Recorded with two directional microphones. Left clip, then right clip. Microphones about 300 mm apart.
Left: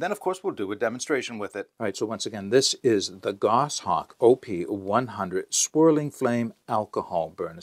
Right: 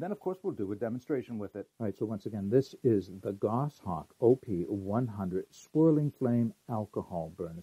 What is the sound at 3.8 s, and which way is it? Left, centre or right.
Speech, centre.